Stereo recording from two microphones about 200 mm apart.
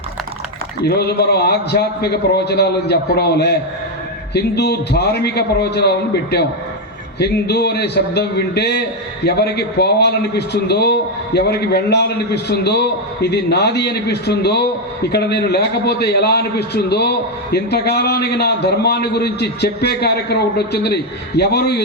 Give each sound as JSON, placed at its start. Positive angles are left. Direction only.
{"t": 0.9, "sound": "a man's voice", "side_deg": 55}